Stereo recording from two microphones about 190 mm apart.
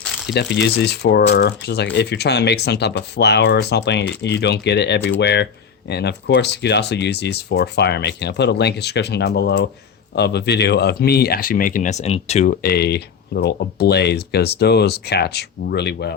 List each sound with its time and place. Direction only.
0.0 s a sound: centre (ahead or behind)
0.3 s speech: 60° left (ahead or behind); by 12.5 s 35° left (ahead or behind)
12.6 s speech: 60° left (ahead or behind)